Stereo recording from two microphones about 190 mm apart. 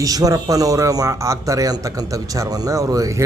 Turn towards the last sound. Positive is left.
turn(degrees=-20)  # may be behind; listen again after turning